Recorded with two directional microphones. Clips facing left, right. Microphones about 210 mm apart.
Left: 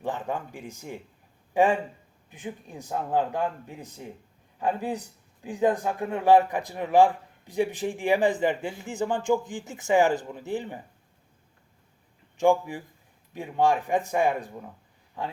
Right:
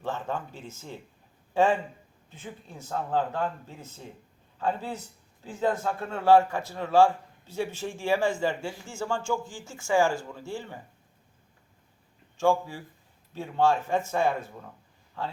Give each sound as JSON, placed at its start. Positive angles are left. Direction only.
{"t": 0.0, "sound": "a man's voice", "side_deg": 15}
{"t": 12.4, "sound": "a man's voice", "side_deg": 15}